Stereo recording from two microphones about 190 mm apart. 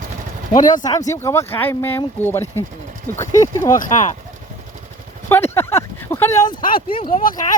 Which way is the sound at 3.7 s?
40° left (ahead or behind).